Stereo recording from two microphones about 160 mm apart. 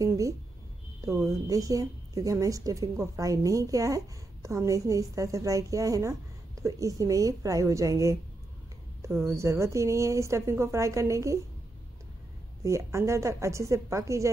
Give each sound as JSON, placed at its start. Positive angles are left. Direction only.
{"t": 1.0, "sound": "a woman's voice", "side_deg": -20}
{"t": 12.6, "sound": "a woman's voice", "side_deg": -20}